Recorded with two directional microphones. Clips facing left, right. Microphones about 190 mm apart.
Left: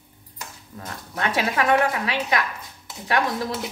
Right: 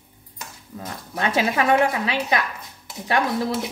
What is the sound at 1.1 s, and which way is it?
Speech, 25° right (ahead or behind).